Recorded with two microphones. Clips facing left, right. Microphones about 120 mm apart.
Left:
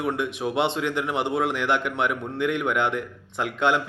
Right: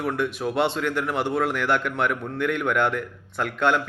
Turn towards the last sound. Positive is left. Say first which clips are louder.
# even
turn(degrees=20)  # may be behind; listen again after turning